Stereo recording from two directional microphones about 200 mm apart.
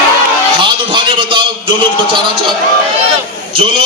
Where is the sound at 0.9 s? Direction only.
25° right (ahead or behind).